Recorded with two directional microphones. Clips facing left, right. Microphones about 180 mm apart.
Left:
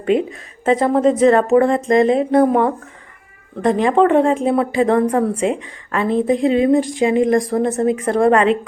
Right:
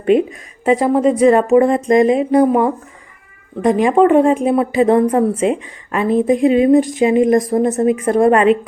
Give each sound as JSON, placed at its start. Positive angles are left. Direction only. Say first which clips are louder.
{"t": 0.0, "sound": "a woman's voice", "louder": "right 4 dB", "side_deg": -20}